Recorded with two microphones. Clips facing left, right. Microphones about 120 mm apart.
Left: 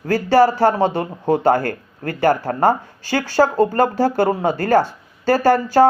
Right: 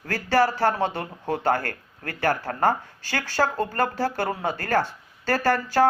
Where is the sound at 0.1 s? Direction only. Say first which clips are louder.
Left 8 dB; 20° left (ahead or behind).